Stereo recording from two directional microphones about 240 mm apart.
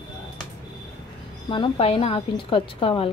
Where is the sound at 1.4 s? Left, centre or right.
Left.